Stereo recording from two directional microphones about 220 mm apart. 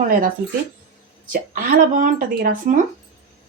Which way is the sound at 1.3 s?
40° right (ahead or behind).